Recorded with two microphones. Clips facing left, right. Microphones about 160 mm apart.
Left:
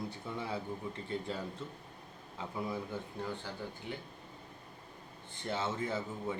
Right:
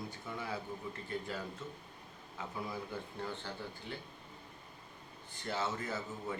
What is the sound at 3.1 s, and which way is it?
Speech, 10° left (ahead or behind).